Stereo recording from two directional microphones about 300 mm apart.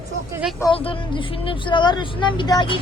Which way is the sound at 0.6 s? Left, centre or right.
Centre.